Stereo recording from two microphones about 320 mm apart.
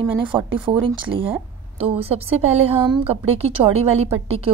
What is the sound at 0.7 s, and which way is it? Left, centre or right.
A woman's voice, centre.